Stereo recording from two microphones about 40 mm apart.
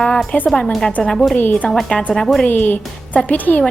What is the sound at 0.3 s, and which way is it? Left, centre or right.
Speech, left.